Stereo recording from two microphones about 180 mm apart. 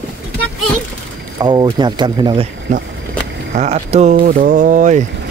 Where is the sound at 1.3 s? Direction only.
25° right (ahead or behind).